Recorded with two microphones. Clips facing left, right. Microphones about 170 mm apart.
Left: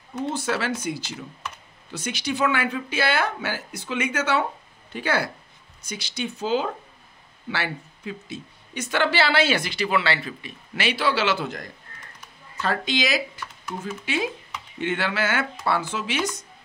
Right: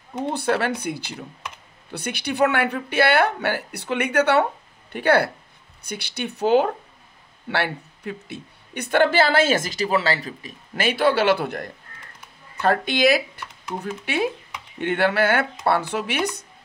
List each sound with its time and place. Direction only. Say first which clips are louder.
0.2 s a woman's voice: right 4 dB; 60° right (ahead or behind)